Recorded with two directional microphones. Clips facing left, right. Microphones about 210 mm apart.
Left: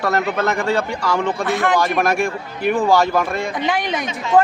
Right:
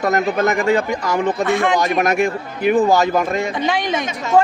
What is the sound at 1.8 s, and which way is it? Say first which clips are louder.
A man's voice: right 2 dB; 20° right (ahead or behind).